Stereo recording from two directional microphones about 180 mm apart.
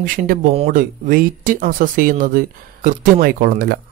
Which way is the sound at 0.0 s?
50° right (ahead or behind).